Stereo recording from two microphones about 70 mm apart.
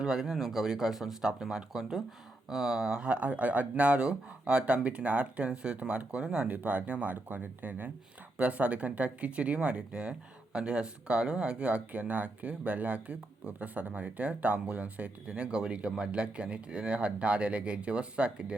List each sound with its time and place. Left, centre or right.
0.0 s speech: centre